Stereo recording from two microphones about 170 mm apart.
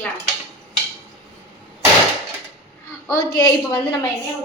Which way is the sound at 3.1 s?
20° left (ahead or behind).